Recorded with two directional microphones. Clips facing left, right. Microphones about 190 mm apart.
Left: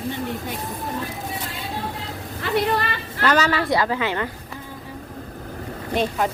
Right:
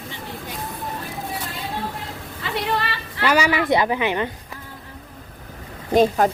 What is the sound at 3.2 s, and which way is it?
Speech, 10° right (ahead or behind).